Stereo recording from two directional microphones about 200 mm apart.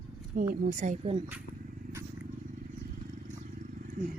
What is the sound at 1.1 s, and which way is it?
Speech, 10° right (ahead or behind).